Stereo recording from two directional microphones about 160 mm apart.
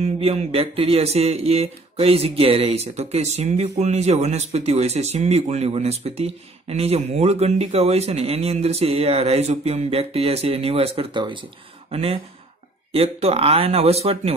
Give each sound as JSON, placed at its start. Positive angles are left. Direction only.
{"t": 0.0, "sound": "speech", "side_deg": -40}